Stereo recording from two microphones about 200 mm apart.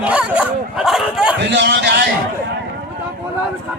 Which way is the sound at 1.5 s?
60° right (ahead or behind).